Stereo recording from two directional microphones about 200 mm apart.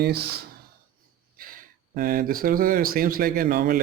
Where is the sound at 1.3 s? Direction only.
45° right (ahead or behind).